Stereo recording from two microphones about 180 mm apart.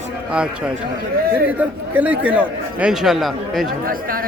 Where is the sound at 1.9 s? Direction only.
10° right (ahead or behind).